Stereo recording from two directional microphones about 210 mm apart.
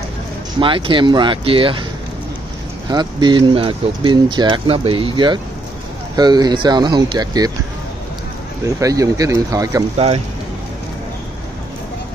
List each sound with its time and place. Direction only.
0.6 s speech: 25° right (ahead or behind)
2.9 s speech: 20° right (ahead or behind)
8.6 s speech: 15° right (ahead or behind)
9.9 s speech: 30° right (ahead or behind)